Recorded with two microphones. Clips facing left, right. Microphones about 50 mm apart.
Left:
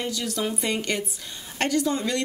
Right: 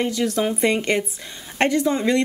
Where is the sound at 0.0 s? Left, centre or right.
Right.